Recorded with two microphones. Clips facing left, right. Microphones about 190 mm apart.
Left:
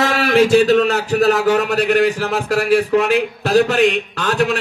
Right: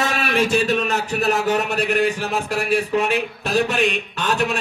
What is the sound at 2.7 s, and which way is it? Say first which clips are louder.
Speech: left 5 dB; 90° left.